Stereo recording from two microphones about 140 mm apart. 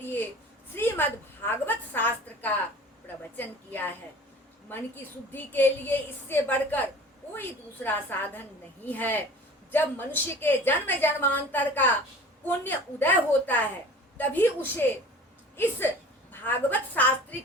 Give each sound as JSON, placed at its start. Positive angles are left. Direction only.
{"t": 0.8, "sound": "a sound", "side_deg": 15}
{"t": 3.3, "sound": "a woman's voice", "side_deg": 15}
{"t": 5.3, "sound": "a woman's voice", "side_deg": 15}
{"t": 7.9, "sound": "a woman's voice", "side_deg": 15}